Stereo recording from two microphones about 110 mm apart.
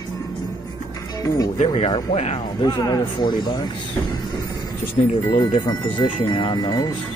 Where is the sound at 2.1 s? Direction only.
70° left (ahead or behind).